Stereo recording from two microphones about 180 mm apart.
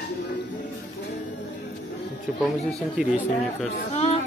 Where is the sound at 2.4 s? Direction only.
Centre (ahead or behind).